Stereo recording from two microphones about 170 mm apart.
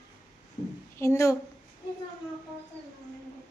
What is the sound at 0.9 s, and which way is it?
Speech, 15° left (ahead or behind).